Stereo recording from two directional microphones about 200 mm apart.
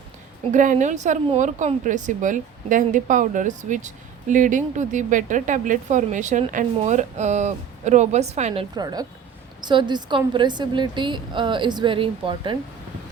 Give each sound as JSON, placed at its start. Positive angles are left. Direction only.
{"t": 0.5, "sound": "a woman's voice", "side_deg": -40}
{"t": 8.7, "sound": "a woman's voice", "side_deg": -20}